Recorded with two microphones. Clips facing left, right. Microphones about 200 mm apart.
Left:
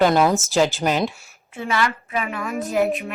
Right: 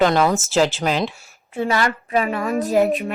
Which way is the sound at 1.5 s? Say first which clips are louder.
Right 3 dB; 40° right (ahead or behind).